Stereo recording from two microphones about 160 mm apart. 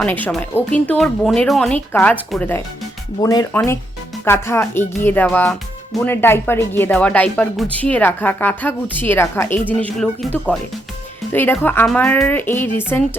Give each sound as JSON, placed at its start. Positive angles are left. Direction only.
{"t": 0.0, "sound": "speech", "side_deg": 10}
{"t": 3.2, "sound": "speech", "side_deg": 25}
{"t": 11.3, "sound": "speech", "side_deg": 15}